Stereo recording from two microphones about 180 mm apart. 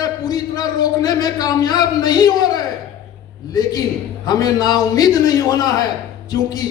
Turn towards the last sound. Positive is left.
turn(degrees=20)  # may be behind; listen again after turning